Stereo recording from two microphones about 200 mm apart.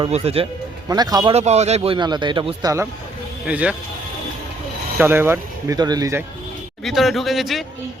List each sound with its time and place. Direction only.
0.1 s a man's voice: 30° right (ahead or behind)
0.9 s a man's voice: 20° right (ahead or behind)
1.3 s a man's voice: 35° right (ahead or behind)
3.4 s speech: 5° right (ahead or behind)
4.9 s speech: 10° right (ahead or behind)
6.8 s speech: centre (ahead or behind)